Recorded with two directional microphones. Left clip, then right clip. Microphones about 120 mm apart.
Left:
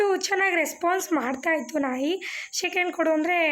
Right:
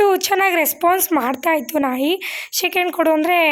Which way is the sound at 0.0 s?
40° right (ahead or behind).